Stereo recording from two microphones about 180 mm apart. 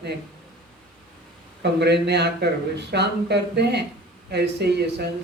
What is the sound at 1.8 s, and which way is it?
Speech, 70° right (ahead or behind).